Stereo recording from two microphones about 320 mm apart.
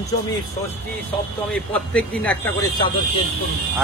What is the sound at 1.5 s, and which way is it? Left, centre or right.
A man's voice, centre.